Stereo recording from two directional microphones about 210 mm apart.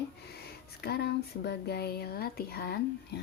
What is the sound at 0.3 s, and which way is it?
Speech, 50° left (ahead or behind).